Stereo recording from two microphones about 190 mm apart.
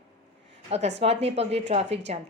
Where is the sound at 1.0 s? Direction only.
35° right (ahead or behind).